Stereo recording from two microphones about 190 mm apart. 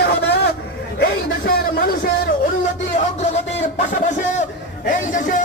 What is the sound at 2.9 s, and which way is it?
Music, 35° left (ahead or behind).